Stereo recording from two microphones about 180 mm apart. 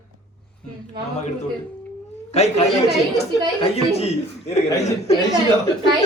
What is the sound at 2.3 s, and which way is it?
A man's voice, 35° left (ahead or behind).